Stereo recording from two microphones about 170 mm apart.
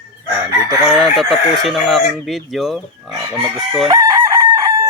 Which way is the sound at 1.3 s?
Centre (ahead or behind).